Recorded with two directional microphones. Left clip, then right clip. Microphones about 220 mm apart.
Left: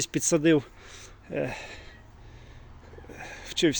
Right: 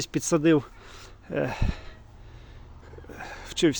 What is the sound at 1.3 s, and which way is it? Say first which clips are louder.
Speech: right 2 dB; 15° right (ahead or behind).